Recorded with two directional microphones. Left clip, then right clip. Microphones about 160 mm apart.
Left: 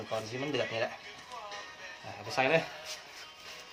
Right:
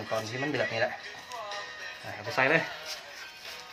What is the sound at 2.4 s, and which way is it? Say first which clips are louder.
Speech: right 3 dB; 15° left (ahead or behind).